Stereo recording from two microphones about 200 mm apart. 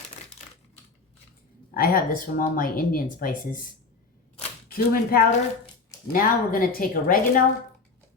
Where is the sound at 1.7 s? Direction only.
50° left (ahead or behind).